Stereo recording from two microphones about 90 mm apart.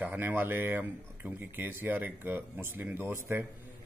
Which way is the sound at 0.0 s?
20° right (ahead or behind).